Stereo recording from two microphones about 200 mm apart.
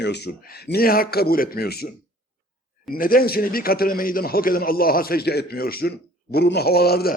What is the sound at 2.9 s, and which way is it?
A man's voice, 45° left (ahead or behind).